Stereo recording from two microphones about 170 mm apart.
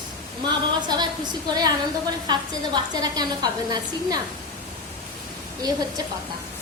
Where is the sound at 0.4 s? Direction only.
25° right (ahead or behind).